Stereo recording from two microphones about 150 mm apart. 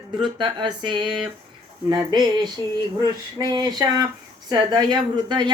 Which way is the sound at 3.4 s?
25° right (ahead or behind).